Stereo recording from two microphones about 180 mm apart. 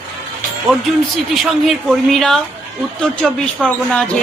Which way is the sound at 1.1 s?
Centre (ahead or behind).